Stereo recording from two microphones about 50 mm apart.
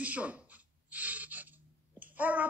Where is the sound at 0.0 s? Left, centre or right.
Right.